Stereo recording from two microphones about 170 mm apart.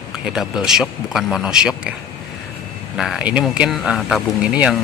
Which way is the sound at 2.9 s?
5° right (ahead or behind).